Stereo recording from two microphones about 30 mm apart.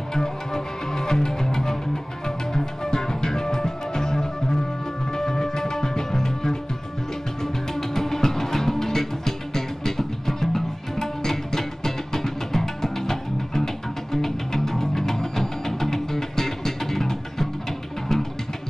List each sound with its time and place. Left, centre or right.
0.1 s music: centre